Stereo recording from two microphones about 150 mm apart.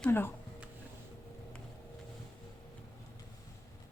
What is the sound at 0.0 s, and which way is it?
Speech, 15° left (ahead or behind).